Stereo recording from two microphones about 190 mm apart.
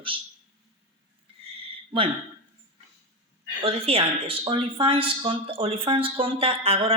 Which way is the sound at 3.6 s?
30° right (ahead or behind).